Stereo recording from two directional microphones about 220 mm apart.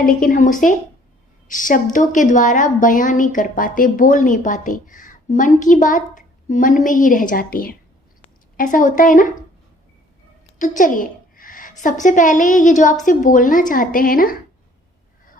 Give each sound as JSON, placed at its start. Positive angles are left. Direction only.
{"t": 0.0, "sound": "a woman's voice", "side_deg": 40}
{"t": 10.6, "sound": "a sound", "side_deg": 35}
{"t": 11.8, "sound": "a woman's voice", "side_deg": 35}